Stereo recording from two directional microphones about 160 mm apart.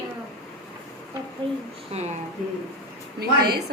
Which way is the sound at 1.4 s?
35° right (ahead or behind).